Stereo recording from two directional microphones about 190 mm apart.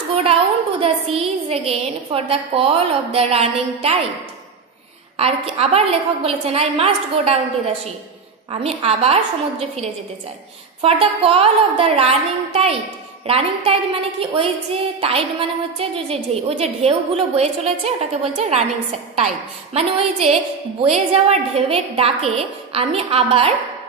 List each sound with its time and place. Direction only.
0.3 s a woman's voice: 30° right (ahead or behind)
5.2 s a woman's voice: 30° right (ahead or behind)